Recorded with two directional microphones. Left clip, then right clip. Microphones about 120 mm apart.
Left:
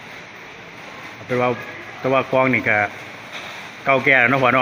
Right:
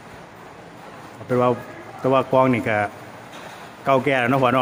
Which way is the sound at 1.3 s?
35° right (ahead or behind).